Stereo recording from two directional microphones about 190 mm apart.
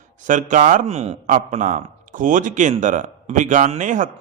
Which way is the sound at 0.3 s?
45° right (ahead or behind).